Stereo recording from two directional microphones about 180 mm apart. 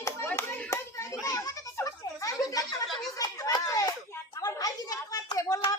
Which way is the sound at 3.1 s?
20° left (ahead or behind).